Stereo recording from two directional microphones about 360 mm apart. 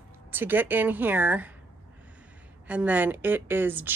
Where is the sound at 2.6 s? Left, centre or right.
Centre.